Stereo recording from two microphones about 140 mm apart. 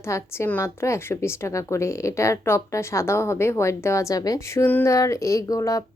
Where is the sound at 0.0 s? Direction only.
20° left (ahead or behind).